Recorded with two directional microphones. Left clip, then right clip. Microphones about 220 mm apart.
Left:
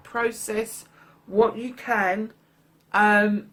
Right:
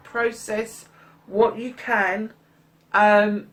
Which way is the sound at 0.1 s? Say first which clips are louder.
Right 2 dB; 45° left (ahead or behind).